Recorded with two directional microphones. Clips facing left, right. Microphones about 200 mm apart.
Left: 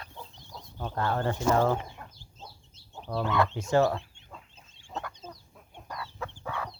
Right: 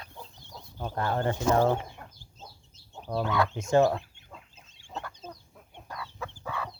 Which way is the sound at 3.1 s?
20° right (ahead or behind).